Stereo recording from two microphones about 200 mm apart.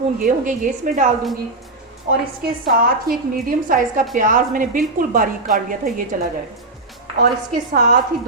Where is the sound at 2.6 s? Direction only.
45° right (ahead or behind).